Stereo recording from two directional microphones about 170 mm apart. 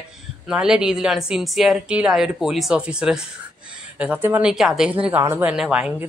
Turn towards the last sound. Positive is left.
turn(degrees=-5)  # may be behind; listen again after turning